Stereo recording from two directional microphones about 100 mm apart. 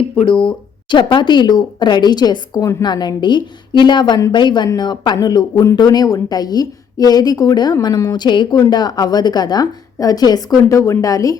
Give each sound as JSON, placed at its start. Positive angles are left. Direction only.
{"t": 0.4, "sound": "a woman's voice", "side_deg": 50}
{"t": 8.2, "sound": "a woman's voice", "side_deg": 50}